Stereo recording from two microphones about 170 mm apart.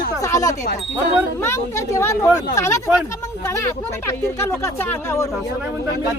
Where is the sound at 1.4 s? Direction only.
15° left (ahead or behind).